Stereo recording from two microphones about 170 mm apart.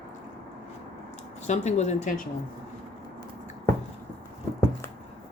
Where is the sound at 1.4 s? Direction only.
40° left (ahead or behind).